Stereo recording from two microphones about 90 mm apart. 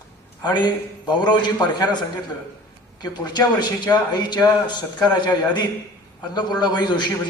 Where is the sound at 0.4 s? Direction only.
50° left (ahead or behind).